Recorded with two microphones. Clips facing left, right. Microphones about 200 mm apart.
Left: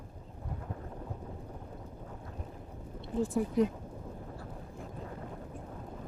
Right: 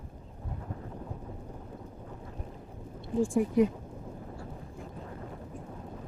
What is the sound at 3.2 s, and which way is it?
Speech, 30° right (ahead or behind).